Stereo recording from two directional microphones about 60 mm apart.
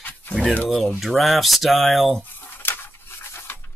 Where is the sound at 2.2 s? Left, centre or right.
Left.